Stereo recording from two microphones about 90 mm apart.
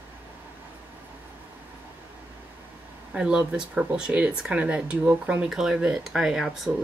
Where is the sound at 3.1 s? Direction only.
10° right (ahead or behind).